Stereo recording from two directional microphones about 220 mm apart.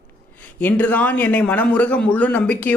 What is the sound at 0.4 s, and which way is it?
A man's voice, 5° left (ahead or behind).